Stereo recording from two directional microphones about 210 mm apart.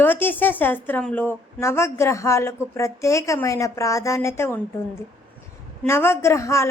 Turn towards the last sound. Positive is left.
turn(degrees=15)  # may be behind; listen again after turning